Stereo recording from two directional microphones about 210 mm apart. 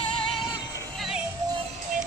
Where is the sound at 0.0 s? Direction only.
25° left (ahead or behind).